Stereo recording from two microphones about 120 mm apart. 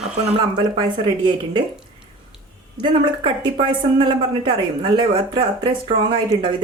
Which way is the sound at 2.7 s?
45° right (ahead or behind).